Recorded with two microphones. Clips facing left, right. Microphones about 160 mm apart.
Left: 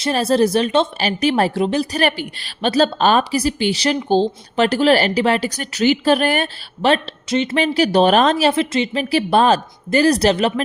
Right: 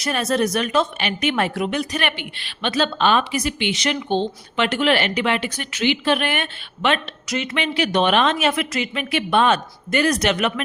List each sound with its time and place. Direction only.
0.0 s a woman's voice: 30° left (ahead or behind)